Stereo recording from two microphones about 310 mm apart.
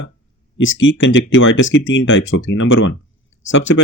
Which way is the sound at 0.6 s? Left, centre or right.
Left.